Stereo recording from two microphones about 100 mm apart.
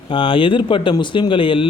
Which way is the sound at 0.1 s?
60° left (ahead or behind).